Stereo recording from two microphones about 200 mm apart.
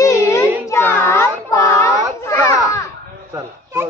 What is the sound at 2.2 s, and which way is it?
Children playing, 15° left (ahead or behind).